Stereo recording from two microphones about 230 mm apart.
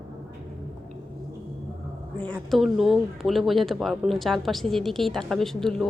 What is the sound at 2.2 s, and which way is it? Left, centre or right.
Speech, centre.